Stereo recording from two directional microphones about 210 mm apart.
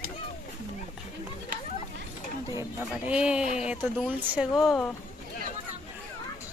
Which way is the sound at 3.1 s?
5° right (ahead or behind).